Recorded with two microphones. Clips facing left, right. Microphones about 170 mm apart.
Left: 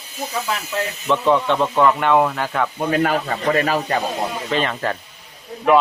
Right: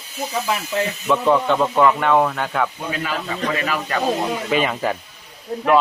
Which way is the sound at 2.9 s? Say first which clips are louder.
Left 6 dB; 55° left (ahead or behind).